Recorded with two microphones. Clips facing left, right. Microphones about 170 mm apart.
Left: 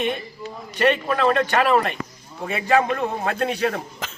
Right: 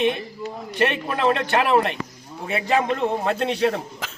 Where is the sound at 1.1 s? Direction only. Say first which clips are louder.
Left 1 dB; 20° right (ahead or behind).